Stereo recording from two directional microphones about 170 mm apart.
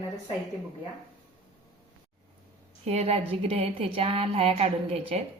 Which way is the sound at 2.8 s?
40° right (ahead or behind).